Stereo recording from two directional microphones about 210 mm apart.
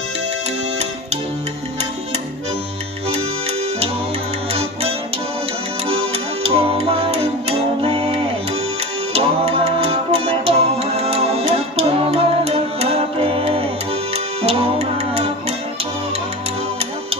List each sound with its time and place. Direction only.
5.9 s music: 30° right (ahead or behind)